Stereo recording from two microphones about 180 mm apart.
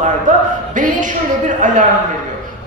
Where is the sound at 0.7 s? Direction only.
45° right (ahead or behind).